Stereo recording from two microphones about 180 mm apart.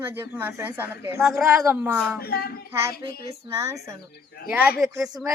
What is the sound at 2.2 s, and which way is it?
Speech, 60° left (ahead or behind).